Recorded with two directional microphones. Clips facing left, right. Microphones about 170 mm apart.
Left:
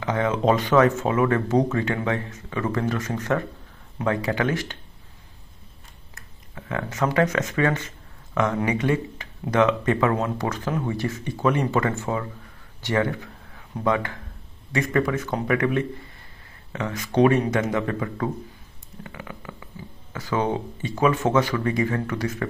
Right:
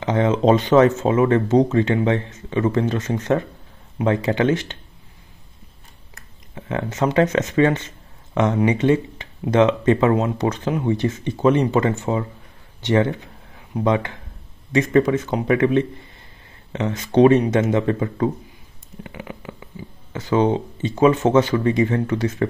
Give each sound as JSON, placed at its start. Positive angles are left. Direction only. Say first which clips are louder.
{"t": 0.0, "sound": "speech", "louder": "right 4 dB", "side_deg": -25}
{"t": 6.5, "sound": "speech", "louder": "right 4 dB", "side_deg": -25}
{"t": 19.0, "sound": "stomach rumble", "louder": "right 4 dB", "side_deg": -20}
{"t": 20.1, "sound": "speech", "louder": "right 6 dB", "side_deg": -25}